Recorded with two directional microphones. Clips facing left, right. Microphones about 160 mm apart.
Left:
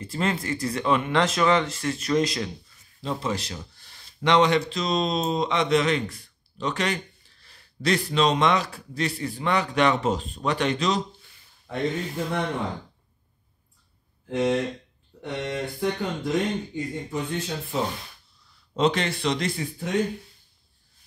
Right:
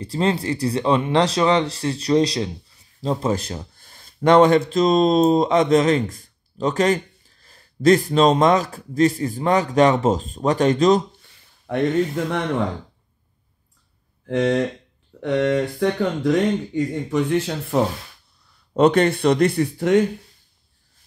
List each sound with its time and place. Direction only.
0.0 s speech: 35° right (ahead or behind)
11.7 s speech: 75° right (ahead or behind)
14.2 s speech: 90° right
18.7 s speech: 55° right (ahead or behind)